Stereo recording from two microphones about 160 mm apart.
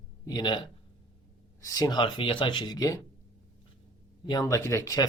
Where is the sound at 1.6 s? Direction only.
20° left (ahead or behind).